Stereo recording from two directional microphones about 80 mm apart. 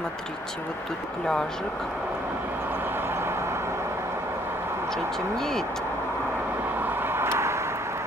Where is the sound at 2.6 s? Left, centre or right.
Right.